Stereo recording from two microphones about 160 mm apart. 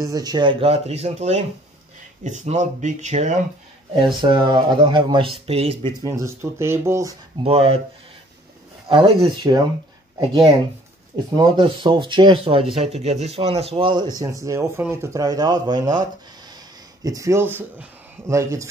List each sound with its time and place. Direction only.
0.0 s speech: 25° right (ahead or behind); by 3.3 s 45° right (ahead or behind)
3.9 s speech: 30° right (ahead or behind)
6.0 s speech: 20° right (ahead or behind)
7.4 s speech: 40° right (ahead or behind)
8.8 s speech: 30° right (ahead or behind)
11.3 s speech: 30° right (ahead or behind)
12.8 s speech: 45° right (ahead or behind); by 18.7 s 20° right (ahead or behind)